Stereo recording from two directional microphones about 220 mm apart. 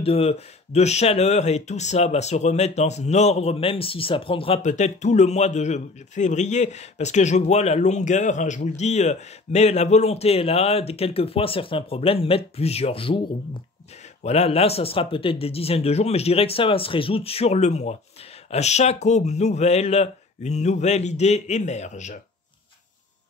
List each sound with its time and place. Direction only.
0.0 s speech: 25° left (ahead or behind)